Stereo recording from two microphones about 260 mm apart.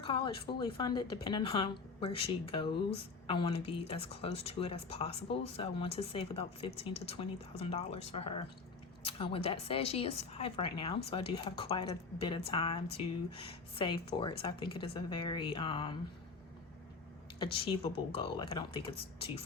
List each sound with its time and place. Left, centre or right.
0.0 s a woman's voice: centre
17.4 s a woman's voice: left